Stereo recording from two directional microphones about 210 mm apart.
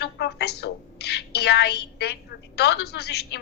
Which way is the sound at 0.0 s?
50° left (ahead or behind).